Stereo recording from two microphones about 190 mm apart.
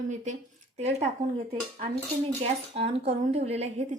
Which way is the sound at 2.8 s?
30° right (ahead or behind).